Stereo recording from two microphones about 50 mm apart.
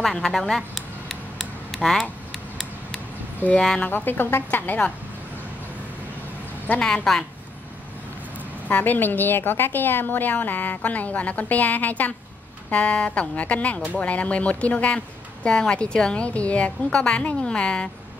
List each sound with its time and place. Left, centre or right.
0.0 s a sound: centre
3.5 s speech: centre
3.9 s a woman's voice: left
6.7 s a woman's voice: left
7.1 s speech: centre
8.6 s a woman's voice: left; by 17.8 s centre